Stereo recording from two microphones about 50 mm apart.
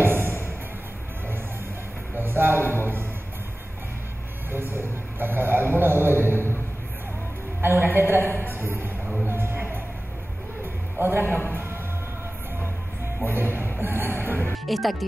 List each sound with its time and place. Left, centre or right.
2.1 s music: right
4.5 s a sound: right
7.6 s a sound: right
9.0 s music: right
13.2 s music: right
14.5 s music: centre